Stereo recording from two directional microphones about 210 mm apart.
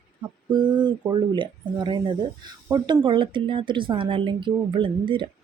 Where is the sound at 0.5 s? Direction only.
20° right (ahead or behind).